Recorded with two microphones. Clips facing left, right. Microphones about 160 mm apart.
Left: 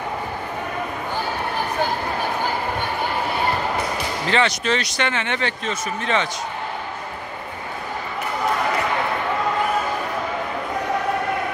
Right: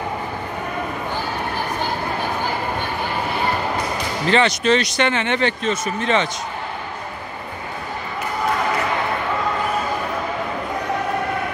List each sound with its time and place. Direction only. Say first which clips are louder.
4.3 s speech: right 4 dB; 25° right (ahead or behind)